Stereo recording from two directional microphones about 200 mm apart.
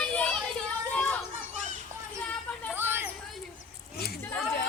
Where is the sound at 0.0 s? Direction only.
5° left (ahead or behind).